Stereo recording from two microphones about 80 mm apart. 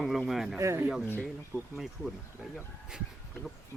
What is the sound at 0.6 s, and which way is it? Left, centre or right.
Speech, right.